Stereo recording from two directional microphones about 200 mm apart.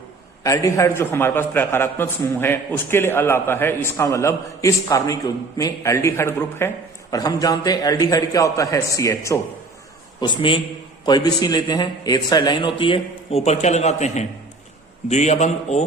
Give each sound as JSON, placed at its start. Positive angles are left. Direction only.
{"t": 0.4, "sound": "a man's voice", "side_deg": 15}